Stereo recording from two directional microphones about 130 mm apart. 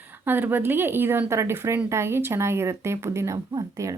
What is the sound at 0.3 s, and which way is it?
Speech, 15° right (ahead or behind).